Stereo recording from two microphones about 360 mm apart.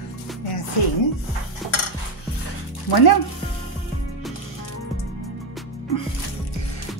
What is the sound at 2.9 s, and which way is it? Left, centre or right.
Speech, left.